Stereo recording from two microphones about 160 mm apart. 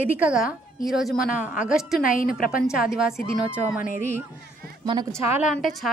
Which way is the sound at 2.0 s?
60° left (ahead or behind).